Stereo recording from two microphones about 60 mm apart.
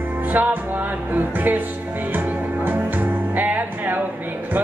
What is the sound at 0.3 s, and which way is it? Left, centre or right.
Music, right.